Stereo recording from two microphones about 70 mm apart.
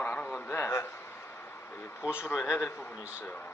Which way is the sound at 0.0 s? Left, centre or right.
Left.